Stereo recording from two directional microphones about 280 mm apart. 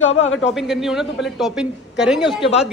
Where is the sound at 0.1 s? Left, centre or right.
Left.